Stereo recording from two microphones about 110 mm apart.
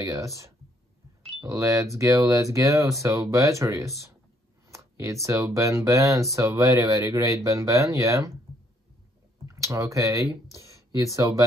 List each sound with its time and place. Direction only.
0.0 s speech: 30° right (ahead or behind)
1.4 s speech: 30° right (ahead or behind)
9.5 s speech: 30° right (ahead or behind)